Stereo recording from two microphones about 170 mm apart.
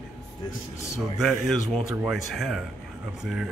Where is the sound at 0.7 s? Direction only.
15° left (ahead or behind).